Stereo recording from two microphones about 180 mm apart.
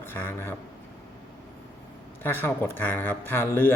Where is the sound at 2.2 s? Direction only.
10° left (ahead or behind).